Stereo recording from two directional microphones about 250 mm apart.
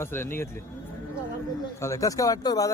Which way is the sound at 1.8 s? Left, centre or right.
Centre.